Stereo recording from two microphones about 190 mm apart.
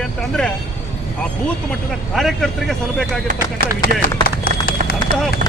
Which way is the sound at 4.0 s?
50° left (ahead or behind).